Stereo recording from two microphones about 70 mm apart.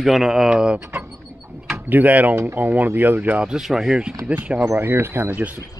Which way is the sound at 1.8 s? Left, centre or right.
Right.